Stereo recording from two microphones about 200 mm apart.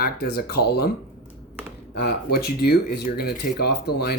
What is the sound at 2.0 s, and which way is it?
Speech, 50° left (ahead or behind).